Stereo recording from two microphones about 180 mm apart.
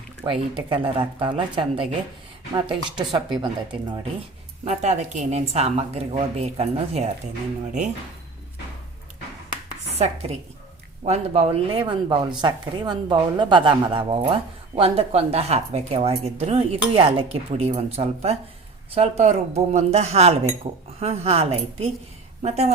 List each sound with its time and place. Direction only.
0.3 s a woman's voice: 30° right (ahead or behind)
4.6 s speech: 40° right (ahead or behind)
10.0 s a woman's voice: 35° right (ahead or behind)